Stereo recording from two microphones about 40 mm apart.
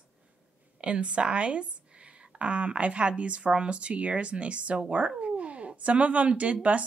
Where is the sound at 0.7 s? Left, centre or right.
Right.